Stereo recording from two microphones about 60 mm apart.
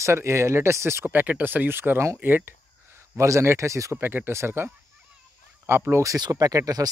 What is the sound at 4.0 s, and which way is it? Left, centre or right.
Speech, right.